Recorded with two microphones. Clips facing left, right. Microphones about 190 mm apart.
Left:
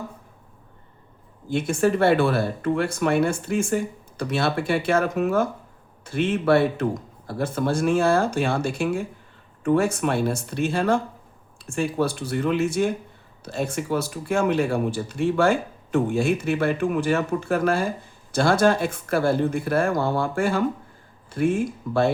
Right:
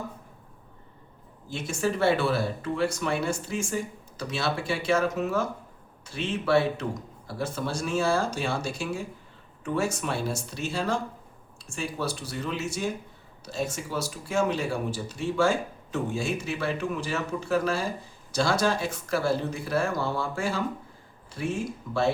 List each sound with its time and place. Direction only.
1.5 s speech: 55° left (ahead or behind)